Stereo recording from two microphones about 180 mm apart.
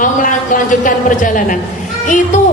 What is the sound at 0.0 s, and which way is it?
A woman's voice, 45° left (ahead or behind).